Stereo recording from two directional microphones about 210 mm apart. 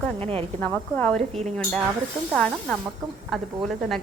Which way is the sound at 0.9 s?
5° left (ahead or behind).